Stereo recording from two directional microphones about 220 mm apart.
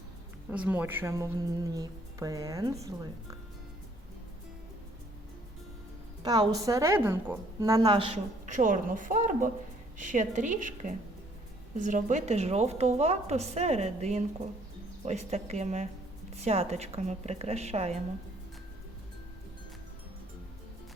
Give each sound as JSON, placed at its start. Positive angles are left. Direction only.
{"t": 0.5, "sound": "a woman's voice", "side_deg": -5}
{"t": 6.2, "sound": "a woman's voice", "side_deg": -15}